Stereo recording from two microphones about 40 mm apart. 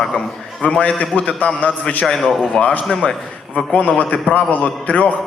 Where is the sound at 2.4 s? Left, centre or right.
Left.